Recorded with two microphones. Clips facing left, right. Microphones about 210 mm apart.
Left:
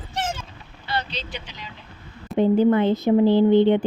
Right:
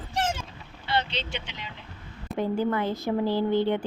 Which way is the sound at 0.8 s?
25° right (ahead or behind).